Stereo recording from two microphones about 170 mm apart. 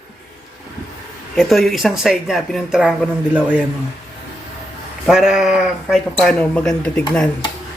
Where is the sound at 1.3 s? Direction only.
Centre (ahead or behind).